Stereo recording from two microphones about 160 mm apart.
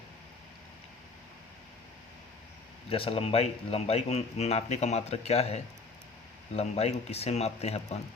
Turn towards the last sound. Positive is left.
turn(degrees=40)  # may be behind; listen again after turning